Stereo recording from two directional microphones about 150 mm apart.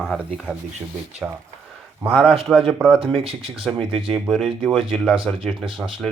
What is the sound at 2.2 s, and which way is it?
Speech, 40° right (ahead or behind).